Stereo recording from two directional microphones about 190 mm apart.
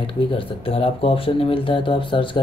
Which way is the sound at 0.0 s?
30° left (ahead or behind).